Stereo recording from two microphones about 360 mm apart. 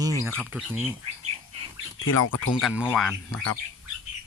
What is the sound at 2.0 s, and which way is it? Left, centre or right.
Speech, left.